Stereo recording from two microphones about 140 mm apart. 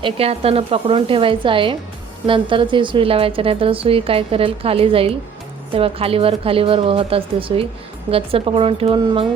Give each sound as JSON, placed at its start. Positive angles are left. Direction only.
{"t": 0.0, "sound": "a woman's voice", "side_deg": -45}